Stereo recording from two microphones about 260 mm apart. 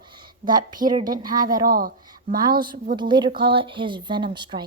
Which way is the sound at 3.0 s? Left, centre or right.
Centre.